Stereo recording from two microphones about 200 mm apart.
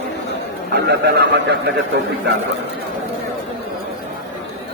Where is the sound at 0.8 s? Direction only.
55° right (ahead or behind).